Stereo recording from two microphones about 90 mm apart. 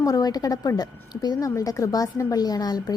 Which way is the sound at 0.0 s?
45° left (ahead or behind).